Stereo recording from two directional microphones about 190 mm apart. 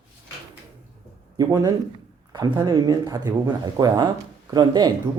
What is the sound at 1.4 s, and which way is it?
Speech, 20° right (ahead or behind).